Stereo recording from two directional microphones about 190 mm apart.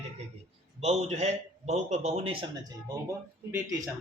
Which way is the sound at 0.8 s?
35° right (ahead or behind).